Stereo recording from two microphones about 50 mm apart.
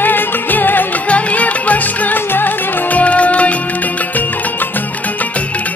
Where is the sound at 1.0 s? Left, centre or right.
Left.